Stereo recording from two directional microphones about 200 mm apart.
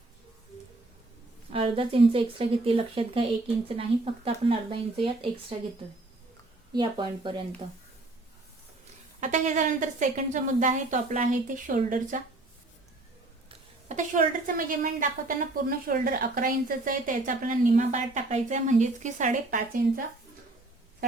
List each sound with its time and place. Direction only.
1.5 s a woman's voice: 25° right (ahead or behind)
6.7 s a woman's voice: 25° right (ahead or behind)
9.2 s a woman's voice: 35° right (ahead or behind)
13.5 s a woman's voice: 35° right (ahead or behind)